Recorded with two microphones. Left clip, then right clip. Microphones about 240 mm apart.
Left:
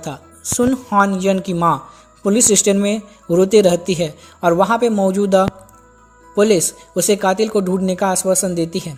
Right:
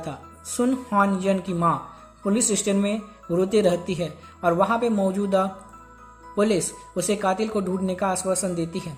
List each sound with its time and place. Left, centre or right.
0.0 s speech: left